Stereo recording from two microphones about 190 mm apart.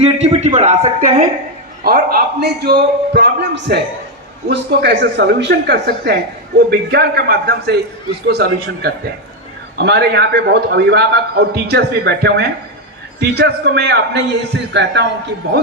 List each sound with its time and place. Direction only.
0.0 s a man's voice: 35° right (ahead or behind)
1.8 s a man's voice: 50° right (ahead or behind)